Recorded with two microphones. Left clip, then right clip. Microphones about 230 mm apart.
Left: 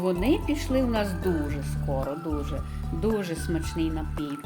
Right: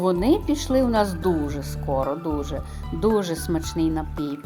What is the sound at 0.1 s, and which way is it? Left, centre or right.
Speech, centre.